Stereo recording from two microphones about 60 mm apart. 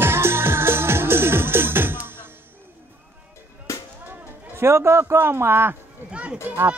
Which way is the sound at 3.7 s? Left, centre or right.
Left.